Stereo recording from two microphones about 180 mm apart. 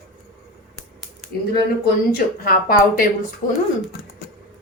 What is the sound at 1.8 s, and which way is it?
Speech, 55° left (ahead or behind).